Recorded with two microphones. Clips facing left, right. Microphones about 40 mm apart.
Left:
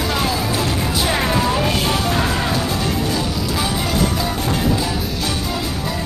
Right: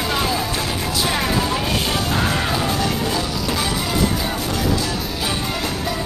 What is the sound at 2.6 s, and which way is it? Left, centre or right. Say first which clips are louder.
Music: right 1 dB; right.